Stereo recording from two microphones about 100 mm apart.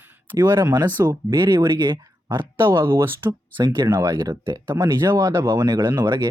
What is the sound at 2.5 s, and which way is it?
Speech, 25° right (ahead or behind).